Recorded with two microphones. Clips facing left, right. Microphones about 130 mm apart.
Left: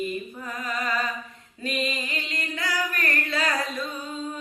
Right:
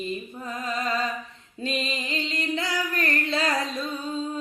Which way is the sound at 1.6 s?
25° right (ahead or behind).